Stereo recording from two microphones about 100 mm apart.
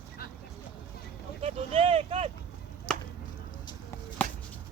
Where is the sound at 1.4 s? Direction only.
80° right.